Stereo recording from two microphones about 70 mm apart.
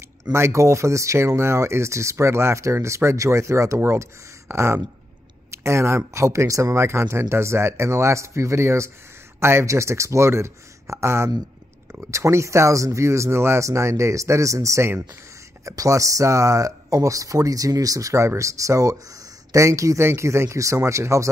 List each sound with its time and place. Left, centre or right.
0.3 s speech: right